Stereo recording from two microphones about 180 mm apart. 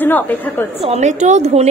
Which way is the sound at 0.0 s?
10° left (ahead or behind).